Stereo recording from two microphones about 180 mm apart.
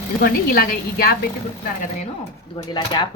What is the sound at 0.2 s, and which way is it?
Speech, 55° left (ahead or behind).